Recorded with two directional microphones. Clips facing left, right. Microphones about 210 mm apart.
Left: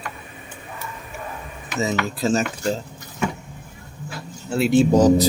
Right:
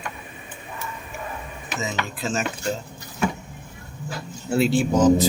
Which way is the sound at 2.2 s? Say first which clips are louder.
Left 6 dB; 35° left (ahead or behind).